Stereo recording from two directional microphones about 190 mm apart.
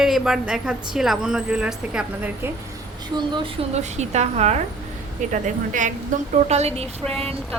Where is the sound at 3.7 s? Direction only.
35° right (ahead or behind).